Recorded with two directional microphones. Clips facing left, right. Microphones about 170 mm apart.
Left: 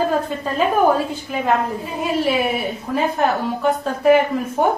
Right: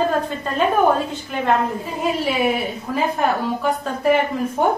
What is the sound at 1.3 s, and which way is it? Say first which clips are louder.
A woman's voice: even; 5° left (ahead or behind).